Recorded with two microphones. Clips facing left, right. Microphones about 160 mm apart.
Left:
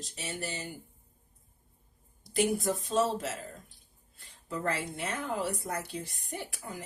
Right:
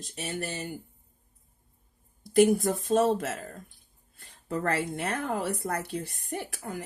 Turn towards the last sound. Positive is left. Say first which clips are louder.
# right 5 dB
turn(degrees=-60)  # may be behind; listen again after turning